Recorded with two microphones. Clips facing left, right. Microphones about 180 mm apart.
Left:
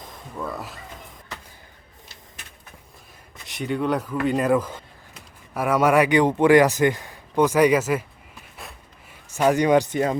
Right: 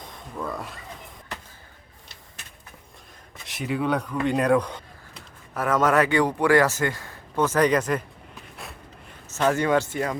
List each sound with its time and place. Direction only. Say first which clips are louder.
0.0 s music: left 1 dB; centre (ahead or behind)
3.4 s a man's voice: left 1 dB; centre (ahead or behind)
8.5 s a sound: even; centre (ahead or behind)
9.3 s a man's voice: left 4 dB; 15° left (ahead or behind)